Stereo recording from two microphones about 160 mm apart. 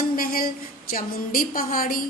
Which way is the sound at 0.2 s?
65° left (ahead or behind).